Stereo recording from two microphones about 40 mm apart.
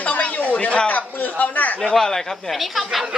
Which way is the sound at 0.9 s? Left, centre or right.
Left.